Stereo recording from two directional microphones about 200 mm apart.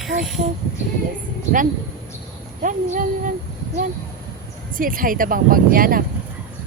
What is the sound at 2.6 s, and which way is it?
Speech, 40° right (ahead or behind).